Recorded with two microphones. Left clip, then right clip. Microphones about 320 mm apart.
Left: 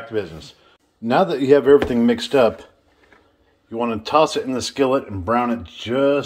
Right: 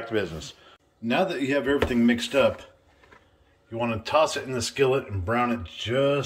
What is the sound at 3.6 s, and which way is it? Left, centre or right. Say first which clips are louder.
Speech: left 5 dB; centre.